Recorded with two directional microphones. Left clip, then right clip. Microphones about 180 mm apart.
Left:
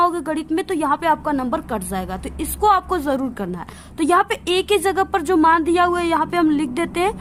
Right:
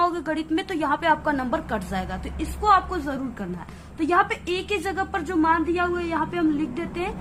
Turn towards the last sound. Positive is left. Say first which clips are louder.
# left 8 dB
turn(degrees=60)  # may be behind; listen again after turning